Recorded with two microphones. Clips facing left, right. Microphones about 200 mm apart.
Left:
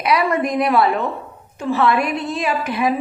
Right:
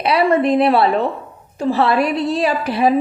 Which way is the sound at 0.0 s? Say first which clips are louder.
Right 4 dB; 30° right (ahead or behind).